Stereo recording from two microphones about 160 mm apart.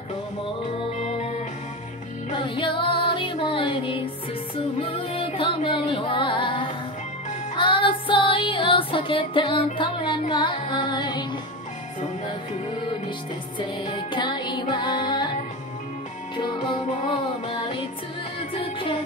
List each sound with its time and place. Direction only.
0.9 s music: 45° left (ahead or behind)
2.4 s music: 30° left (ahead or behind)
13.6 s music: 30° left (ahead or behind)
16.3 s music: 30° left (ahead or behind)